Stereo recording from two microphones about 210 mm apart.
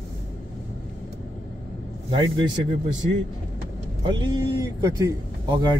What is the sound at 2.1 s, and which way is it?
Speech, 25° right (ahead or behind).